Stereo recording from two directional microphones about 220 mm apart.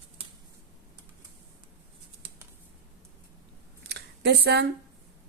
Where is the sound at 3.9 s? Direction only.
50° right (ahead or behind).